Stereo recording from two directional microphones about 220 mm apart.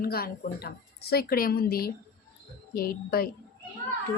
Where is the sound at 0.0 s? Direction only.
45° left (ahead or behind).